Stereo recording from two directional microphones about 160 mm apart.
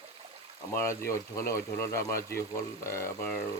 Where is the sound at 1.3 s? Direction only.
20° left (ahead or behind).